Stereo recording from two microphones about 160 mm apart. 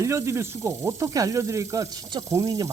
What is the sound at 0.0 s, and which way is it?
Speech, 20° right (ahead or behind).